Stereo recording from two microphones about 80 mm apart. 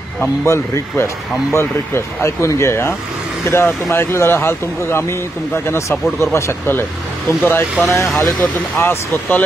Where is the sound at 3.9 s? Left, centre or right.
Left.